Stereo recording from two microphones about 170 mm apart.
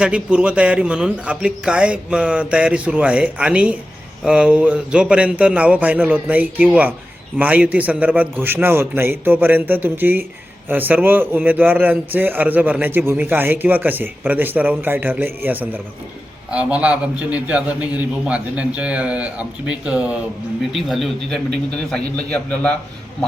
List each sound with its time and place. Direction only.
0.0 s a man's voice: 5° right (ahead or behind)